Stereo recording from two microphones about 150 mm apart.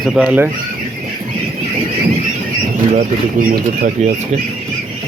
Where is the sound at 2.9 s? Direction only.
65° right (ahead or behind).